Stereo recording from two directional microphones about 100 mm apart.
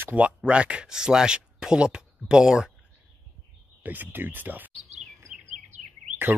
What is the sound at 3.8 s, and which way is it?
Speech, 20° right (ahead or behind).